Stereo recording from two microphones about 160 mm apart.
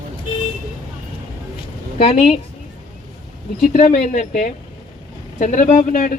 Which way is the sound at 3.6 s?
50° left (ahead or behind).